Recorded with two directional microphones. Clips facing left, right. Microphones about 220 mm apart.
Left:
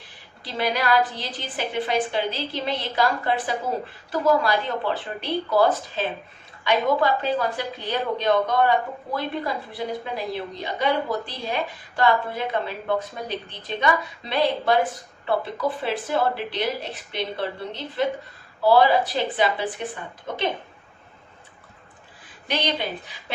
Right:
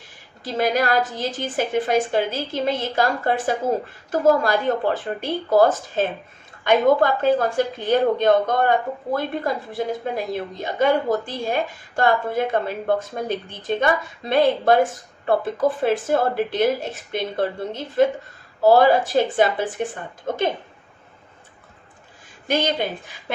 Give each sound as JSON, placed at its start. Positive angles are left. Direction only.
{"t": 0.0, "sound": "a woman's voice", "side_deg": -45}
{"t": 22.4, "sound": "a woman's voice", "side_deg": -45}